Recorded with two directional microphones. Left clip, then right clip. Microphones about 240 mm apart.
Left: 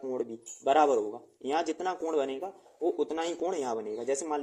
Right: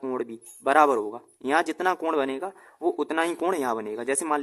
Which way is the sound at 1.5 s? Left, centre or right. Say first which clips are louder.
Right 7 dB; right.